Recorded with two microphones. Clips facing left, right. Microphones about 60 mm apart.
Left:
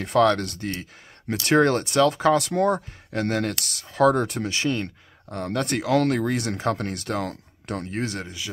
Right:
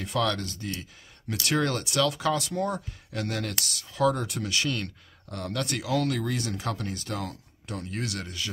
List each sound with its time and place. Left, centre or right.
0.0 s speech: left
1.3 s speech: left
2.3 s speech: left
2.7 s speech: left
7.9 s speech: left